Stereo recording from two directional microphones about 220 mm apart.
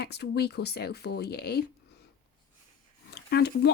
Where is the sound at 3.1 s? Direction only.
45° left (ahead or behind).